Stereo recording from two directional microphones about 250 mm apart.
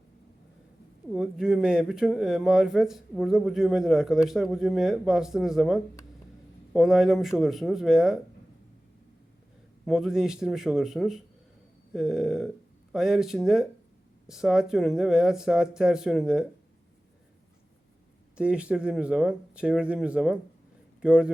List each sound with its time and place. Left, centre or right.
1.1 s speech: centre
9.8 s speech: centre
18.3 s speech: centre